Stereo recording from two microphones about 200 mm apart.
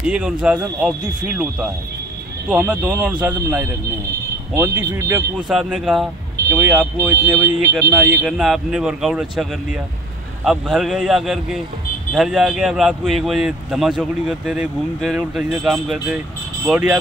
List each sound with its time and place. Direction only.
0.0 s speech: 5° right (ahead or behind)
5.5 s speech: centre (ahead or behind)
6.3 s vehicle: 10° right (ahead or behind)
7.1 s speech: 15° right (ahead or behind)
8.3 s speech: centre (ahead or behind)